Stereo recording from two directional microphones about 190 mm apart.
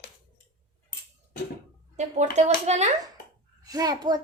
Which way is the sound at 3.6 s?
20° right (ahead or behind).